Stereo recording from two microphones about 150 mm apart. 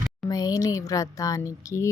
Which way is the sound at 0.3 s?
25° left (ahead or behind).